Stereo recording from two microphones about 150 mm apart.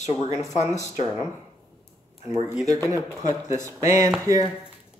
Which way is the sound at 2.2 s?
15° right (ahead or behind).